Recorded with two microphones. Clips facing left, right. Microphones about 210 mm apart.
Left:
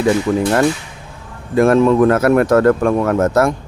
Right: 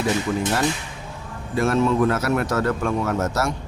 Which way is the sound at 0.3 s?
55° left (ahead or behind).